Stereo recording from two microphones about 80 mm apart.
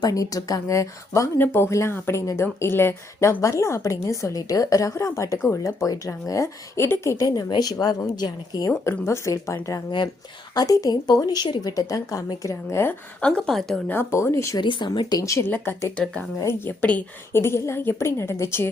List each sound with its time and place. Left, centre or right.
0.0 s a woman's voice: left
1.4 s a woman's voice: left
7.2 s a woman's voice: left
9.0 s a woman's voice: left
10.5 s a woman's voice: left
13.2 s a woman's voice: centre
13.8 s a woman's voice: left
14.2 s a woman's voice: left
14.6 s speech: left
15.2 s a woman's voice: left
15.4 s a woman's voice: left
17.3 s a woman's voice: left